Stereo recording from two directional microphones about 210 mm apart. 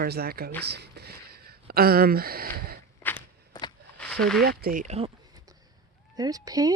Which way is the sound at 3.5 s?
20° left (ahead or behind).